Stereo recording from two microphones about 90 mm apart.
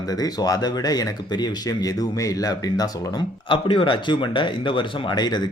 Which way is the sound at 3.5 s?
65° left (ahead or behind).